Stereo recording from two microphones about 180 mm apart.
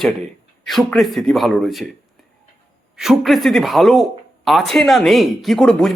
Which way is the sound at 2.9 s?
Centre (ahead or behind).